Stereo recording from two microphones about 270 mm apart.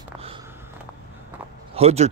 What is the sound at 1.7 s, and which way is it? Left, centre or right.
Speech, right.